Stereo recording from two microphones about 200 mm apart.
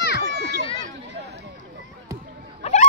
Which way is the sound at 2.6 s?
30° left (ahead or behind).